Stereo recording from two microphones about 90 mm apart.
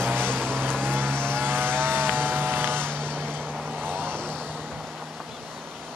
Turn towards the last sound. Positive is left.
turn(degrees=-25)  # may be behind; listen again after turning